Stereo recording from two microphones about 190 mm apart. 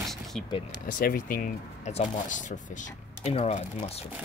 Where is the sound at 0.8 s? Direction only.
45° left (ahead or behind).